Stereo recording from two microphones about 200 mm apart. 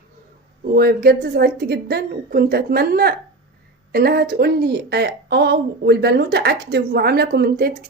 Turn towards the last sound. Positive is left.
turn(degrees=-45)  # may be behind; listen again after turning